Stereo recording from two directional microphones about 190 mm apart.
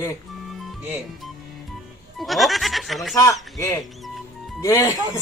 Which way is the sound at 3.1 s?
15° left (ahead or behind).